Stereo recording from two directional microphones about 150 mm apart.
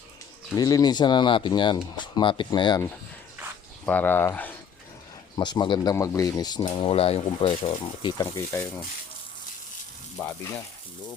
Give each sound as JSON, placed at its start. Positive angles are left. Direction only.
{"t": 0.5, "sound": "speech", "side_deg": 25}
{"t": 3.8, "sound": "speech", "side_deg": 10}
{"t": 5.4, "sound": "speech", "side_deg": 30}
{"t": 8.2, "sound": "speech", "side_deg": 15}
{"t": 10.2, "sound": "speech", "side_deg": 15}